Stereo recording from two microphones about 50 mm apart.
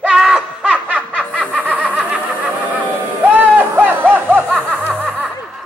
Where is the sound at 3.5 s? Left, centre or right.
Right.